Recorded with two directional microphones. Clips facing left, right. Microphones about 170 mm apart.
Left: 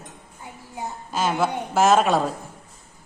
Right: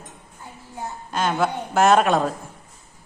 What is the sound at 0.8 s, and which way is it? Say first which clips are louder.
A woman's voice: even; 5° left (ahead or behind).